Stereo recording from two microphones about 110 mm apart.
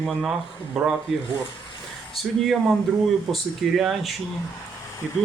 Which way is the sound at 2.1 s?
Centre (ahead or behind).